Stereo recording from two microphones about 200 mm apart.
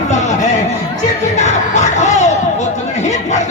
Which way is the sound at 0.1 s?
35° left (ahead or behind).